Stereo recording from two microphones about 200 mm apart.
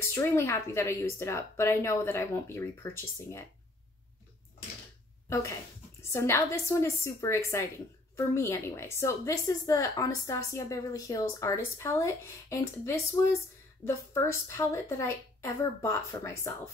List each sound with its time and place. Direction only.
0.0 s a woman's voice: 15° left (ahead or behind)
6.0 s a woman's voice: 15° left (ahead or behind)